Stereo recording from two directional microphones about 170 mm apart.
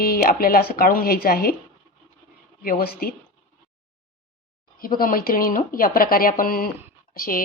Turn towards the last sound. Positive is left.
turn(degrees=55)  # may be behind; listen again after turning